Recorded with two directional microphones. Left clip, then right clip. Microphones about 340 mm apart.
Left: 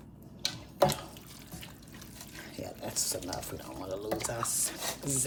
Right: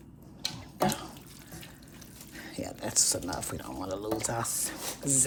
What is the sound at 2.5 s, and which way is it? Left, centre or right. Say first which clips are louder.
Speech: right 6 dB; right.